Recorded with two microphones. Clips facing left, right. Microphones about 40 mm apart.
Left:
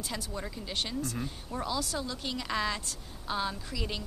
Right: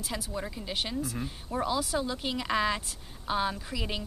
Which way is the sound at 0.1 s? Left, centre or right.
Centre.